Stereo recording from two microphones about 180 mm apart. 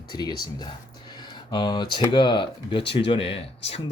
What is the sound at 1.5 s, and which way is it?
Speech, 25° left (ahead or behind).